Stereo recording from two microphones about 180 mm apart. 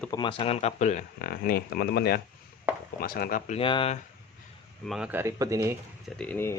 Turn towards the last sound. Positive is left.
turn(degrees=10)  # may be behind; listen again after turning